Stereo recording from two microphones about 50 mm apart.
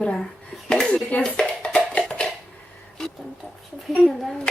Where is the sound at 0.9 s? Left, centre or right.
Left.